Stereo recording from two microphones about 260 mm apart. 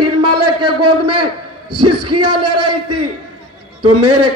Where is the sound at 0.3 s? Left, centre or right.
Right.